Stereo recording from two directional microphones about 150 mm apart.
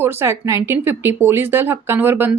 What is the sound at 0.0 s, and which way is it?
A woman's voice, 15° right (ahead or behind).